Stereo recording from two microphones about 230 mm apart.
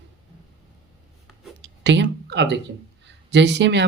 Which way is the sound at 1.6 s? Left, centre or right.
Right.